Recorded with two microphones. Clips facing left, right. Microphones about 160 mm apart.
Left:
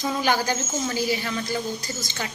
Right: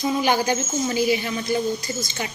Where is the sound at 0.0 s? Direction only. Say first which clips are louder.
Right 3 dB; 15° right (ahead or behind).